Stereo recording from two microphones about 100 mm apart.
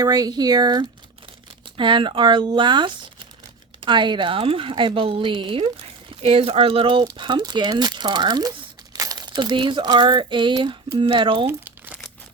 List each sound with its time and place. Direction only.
0.0 s speech: 40° right (ahead or behind)
1.7 s speech: 55° right (ahead or behind)
11.4 s crumpling: 20° right (ahead or behind)